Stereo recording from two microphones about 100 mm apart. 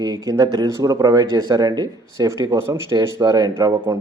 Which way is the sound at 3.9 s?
25° right (ahead or behind).